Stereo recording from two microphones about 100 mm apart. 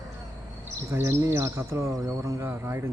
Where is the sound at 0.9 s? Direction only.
25° right (ahead or behind).